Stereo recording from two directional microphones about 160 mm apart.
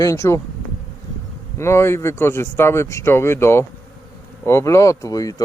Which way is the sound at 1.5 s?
15° left (ahead or behind).